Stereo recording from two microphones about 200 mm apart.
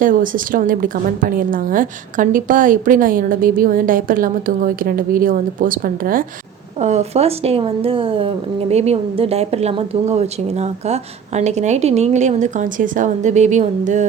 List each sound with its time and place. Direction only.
0.0 s a woman's voice: 40° right (ahead or behind)
6.7 s a woman's voice: 35° right (ahead or behind)